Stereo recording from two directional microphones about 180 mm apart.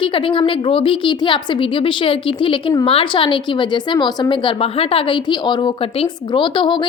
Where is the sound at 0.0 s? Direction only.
30° left (ahead or behind).